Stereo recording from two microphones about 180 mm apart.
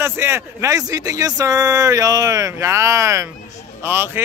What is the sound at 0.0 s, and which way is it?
Speech, 15° right (ahead or behind).